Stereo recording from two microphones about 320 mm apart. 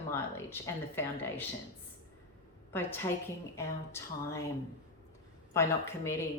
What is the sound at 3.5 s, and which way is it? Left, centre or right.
Speech, centre.